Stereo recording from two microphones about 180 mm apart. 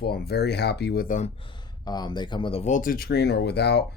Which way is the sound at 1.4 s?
25° left (ahead or behind).